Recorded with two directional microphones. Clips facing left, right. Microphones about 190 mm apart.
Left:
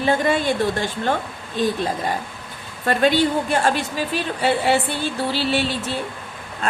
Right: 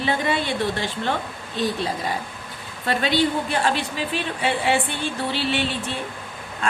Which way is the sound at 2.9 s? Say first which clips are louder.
Left 4 dB; 45° left (ahead or behind).